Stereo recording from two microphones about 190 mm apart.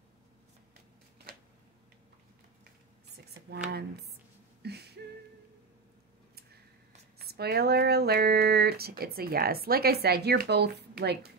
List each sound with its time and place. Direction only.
3.4 s speech: 60° right (ahead or behind)
4.6 s a sound: 60° right (ahead or behind)
7.2 s speech: 55° right (ahead or behind)